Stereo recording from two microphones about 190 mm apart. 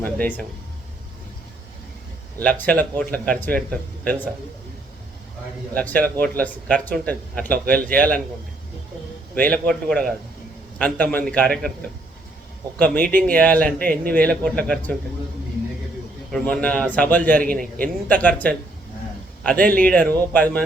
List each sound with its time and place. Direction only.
0.0 s speech: 10° left (ahead or behind)
2.4 s a man's voice: 10° left (ahead or behind)
5.7 s speech: 10° left (ahead or behind)
9.3 s a man's voice: 5° left (ahead or behind)
13.2 s speech: 5° left (ahead or behind)
16.3 s speech: 5° left (ahead or behind)
19.5 s speech: 45° right (ahead or behind)
19.9 s speech: 10° left (ahead or behind)